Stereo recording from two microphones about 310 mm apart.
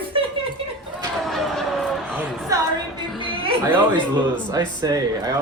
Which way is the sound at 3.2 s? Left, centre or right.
Centre.